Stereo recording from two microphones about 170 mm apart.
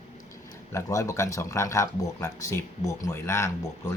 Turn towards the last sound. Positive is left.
turn(degrees=15)  # may be behind; listen again after turning